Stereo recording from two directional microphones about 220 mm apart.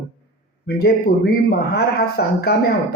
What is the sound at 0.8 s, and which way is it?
A man's voice, 45° left (ahead or behind).